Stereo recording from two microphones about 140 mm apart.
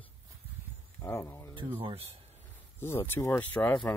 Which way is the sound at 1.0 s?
20° left (ahead or behind).